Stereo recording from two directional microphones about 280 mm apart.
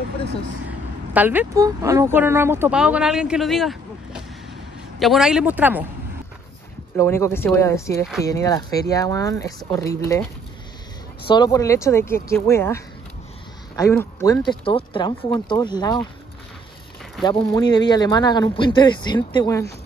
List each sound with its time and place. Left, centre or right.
0.7 s speech: centre
7.0 s speech: centre
11.2 s speech: centre
17.2 s speech: centre